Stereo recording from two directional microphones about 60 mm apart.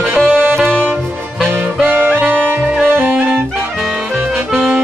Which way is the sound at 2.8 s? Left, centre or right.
Right.